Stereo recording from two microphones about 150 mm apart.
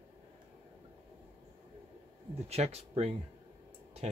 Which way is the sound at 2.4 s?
45° right (ahead or behind).